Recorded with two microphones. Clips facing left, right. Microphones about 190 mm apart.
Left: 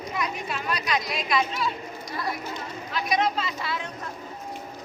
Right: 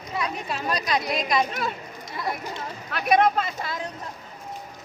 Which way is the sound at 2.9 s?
60° right (ahead or behind).